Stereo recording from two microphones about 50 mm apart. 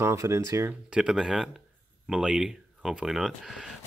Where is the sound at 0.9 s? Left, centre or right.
Centre.